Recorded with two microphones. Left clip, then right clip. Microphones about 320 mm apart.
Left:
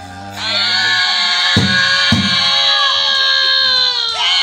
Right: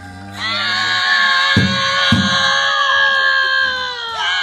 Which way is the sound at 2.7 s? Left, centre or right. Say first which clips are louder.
Left 2 dB; centre.